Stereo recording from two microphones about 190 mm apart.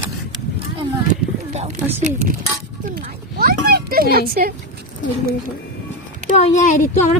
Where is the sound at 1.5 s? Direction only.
40° right (ahead or behind).